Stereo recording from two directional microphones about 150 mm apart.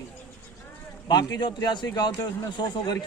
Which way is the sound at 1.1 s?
30° left (ahead or behind).